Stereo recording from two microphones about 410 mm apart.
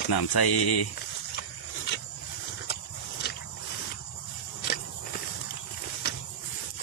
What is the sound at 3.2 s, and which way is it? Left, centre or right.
Vehicle, left.